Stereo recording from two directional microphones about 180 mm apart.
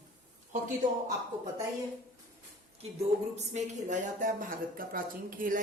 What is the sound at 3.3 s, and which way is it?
A woman's voice, 40° right (ahead or behind).